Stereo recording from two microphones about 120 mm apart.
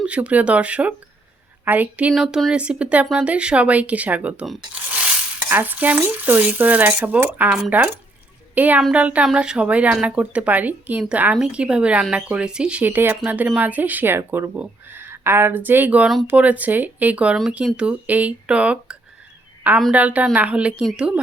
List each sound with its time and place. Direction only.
0.0 s speech: 10° right (ahead or behind)
2.1 s speech: centre (ahead or behind)
5.5 s a woman's voice: 15° right (ahead or behind)